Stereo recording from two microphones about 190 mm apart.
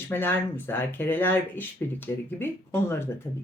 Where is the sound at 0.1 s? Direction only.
10° left (ahead or behind).